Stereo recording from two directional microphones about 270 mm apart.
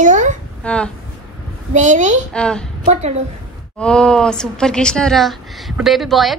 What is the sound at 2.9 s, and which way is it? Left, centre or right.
Speech, right.